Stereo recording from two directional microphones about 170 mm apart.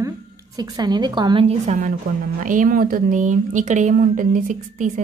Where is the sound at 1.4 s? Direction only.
45° right (ahead or behind).